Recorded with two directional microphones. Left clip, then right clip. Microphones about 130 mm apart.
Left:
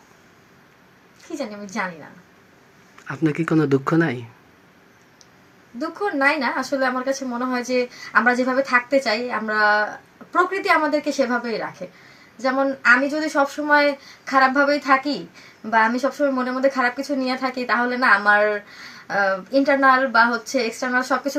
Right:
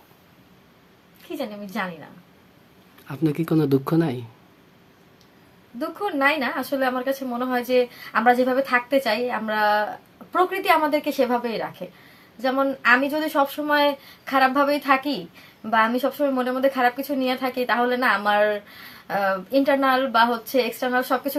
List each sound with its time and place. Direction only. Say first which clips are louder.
1.4 s a woman's voice: left 2 dB; 15° right (ahead or behind)
3.1 s speech: left 2 dB; 20° right (ahead or behind)
5.8 s a woman's voice: left 2 dB; 10° right (ahead or behind)